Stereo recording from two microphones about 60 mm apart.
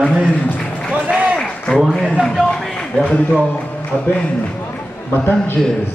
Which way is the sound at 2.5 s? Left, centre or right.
Centre.